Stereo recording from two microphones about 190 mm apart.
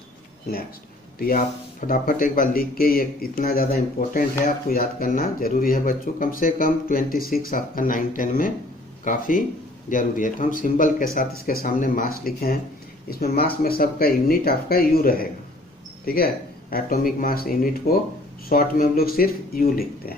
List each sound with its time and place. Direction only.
1.9 s speech: 45° left (ahead or behind)